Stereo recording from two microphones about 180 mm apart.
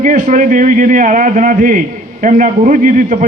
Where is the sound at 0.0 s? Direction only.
45° right (ahead or behind).